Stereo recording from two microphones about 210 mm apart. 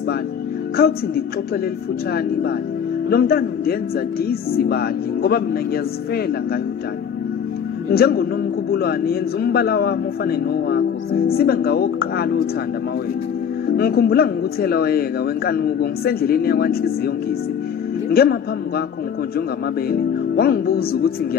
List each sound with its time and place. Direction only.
0.7 s a man's voice: 45° left (ahead or behind)
3.1 s a man's voice: 45° left (ahead or behind)
7.9 s a man's voice: 45° left (ahead or behind)
13.7 s a man's voice: 45° left (ahead or behind)
18.1 s a man's voice: 45° left (ahead or behind)
19.9 s music: 45° left (ahead or behind)